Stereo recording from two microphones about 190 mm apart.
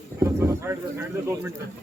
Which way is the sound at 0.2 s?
15° right (ahead or behind).